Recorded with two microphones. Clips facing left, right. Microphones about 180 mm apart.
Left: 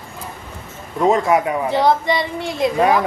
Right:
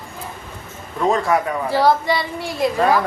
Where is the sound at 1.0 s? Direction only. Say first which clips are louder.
Left 3 dB; 20° left (ahead or behind).